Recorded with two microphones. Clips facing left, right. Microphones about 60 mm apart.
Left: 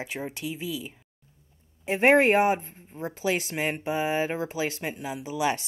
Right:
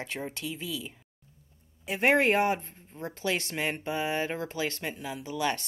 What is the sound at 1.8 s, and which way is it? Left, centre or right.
Speech, left.